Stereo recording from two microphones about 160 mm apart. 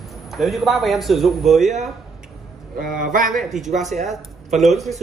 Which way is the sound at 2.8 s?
60° right (ahead or behind).